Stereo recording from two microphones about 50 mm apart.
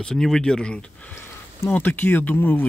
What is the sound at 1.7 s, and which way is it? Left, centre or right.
Speech, left.